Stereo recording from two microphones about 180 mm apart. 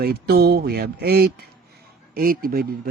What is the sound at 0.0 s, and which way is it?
Speech, 60° right (ahead or behind).